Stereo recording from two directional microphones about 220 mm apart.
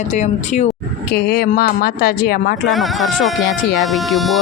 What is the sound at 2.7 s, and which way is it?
Speech, centre (ahead or behind).